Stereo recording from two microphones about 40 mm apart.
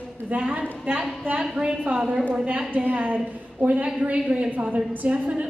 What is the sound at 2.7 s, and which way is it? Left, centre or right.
A woman's voice, right.